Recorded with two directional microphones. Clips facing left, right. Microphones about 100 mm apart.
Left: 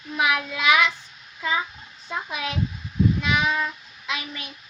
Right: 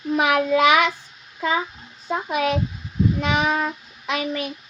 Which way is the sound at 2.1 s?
45° right (ahead or behind).